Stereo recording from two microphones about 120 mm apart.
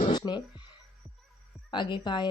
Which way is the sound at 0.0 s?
35° left (ahead or behind).